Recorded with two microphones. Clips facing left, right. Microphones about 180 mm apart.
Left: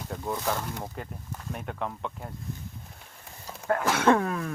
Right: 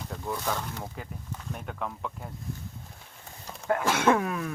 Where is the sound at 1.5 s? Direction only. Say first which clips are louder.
Left 3 dB; centre (ahead or behind).